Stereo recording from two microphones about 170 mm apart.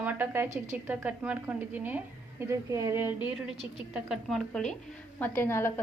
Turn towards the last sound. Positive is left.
turn(degrees=15)  # may be behind; listen again after turning